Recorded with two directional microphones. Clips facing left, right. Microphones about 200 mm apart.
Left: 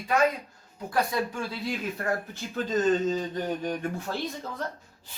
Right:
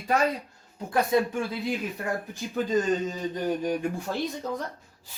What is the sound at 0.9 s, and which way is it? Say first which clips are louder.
Speech: right 4 dB; 20° right (ahead or behind).